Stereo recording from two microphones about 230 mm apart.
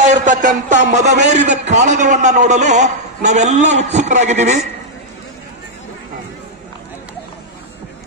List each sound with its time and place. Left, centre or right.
0.0 s a man's voice: right